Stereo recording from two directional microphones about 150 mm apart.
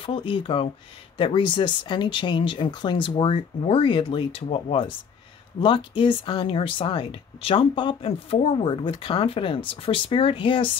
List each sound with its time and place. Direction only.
0.0 s speech: 35° left (ahead or behind)